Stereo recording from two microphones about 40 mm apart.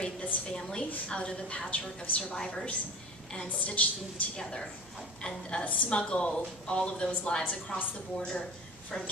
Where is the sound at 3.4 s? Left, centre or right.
Left.